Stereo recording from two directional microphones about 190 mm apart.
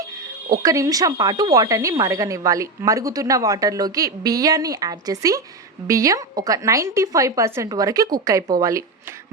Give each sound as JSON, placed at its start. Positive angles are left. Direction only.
{"t": 0.6, "sound": "a woman's voice", "side_deg": -15}